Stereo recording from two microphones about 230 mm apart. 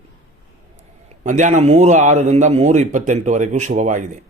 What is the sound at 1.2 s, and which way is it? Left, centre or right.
Speech, right.